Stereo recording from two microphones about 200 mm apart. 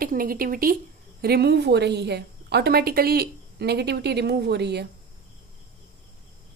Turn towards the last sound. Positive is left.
turn(degrees=-55)  # may be behind; listen again after turning